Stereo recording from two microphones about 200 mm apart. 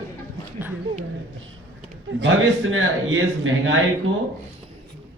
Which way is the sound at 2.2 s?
80° right.